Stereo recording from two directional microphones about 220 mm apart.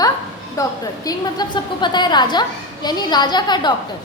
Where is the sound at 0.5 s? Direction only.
15° left (ahead or behind).